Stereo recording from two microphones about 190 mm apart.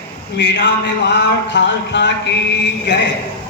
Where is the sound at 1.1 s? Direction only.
65° left (ahead or behind).